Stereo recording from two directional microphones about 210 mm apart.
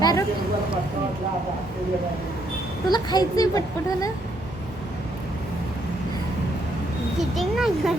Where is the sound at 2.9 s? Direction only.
20° left (ahead or behind).